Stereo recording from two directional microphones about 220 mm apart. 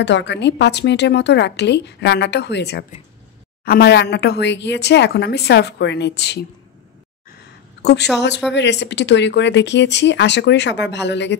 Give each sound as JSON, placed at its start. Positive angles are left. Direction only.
{"t": 0.0, "sound": "a woman's voice", "side_deg": 55}
{"t": 7.8, "sound": "a woman's voice", "side_deg": 50}